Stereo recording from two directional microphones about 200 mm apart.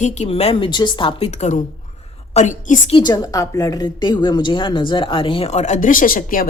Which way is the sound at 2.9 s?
20° left (ahead or behind).